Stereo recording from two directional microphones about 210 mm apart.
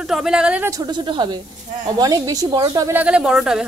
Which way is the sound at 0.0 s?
Centre (ahead or behind).